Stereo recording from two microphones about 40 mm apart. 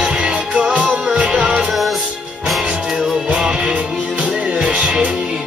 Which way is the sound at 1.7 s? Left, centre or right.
Centre.